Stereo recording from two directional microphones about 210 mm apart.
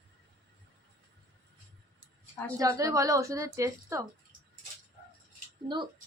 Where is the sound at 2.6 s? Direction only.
15° right (ahead or behind).